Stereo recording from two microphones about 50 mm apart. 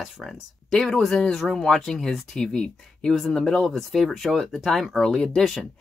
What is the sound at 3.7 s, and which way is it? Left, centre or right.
Speech, centre.